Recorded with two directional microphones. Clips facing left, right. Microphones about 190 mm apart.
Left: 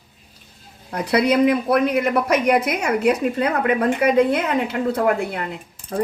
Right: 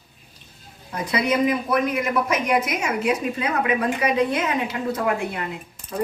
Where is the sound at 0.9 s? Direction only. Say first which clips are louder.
Left 5 dB; 65° left (ahead or behind).